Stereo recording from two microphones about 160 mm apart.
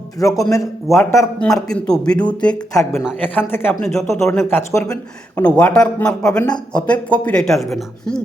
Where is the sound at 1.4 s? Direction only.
5° left (ahead or behind).